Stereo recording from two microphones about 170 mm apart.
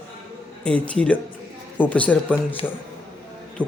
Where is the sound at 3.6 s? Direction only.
5° left (ahead or behind).